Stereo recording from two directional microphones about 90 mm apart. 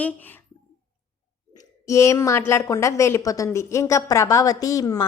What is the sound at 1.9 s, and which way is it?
A woman's voice, 35° left (ahead or behind).